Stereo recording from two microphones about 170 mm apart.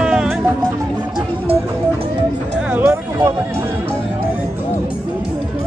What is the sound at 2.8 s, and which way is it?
Music, 15° right (ahead or behind).